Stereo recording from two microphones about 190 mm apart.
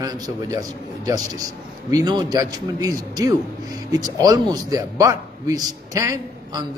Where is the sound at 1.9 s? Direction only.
20° right (ahead or behind).